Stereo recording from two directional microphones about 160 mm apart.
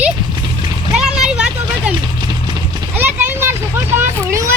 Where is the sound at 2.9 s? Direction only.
10° right (ahead or behind).